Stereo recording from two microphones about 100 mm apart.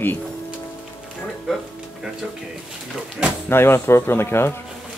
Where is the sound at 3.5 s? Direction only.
25° left (ahead or behind).